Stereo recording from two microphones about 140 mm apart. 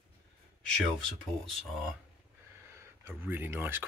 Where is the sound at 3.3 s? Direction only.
15° right (ahead or behind).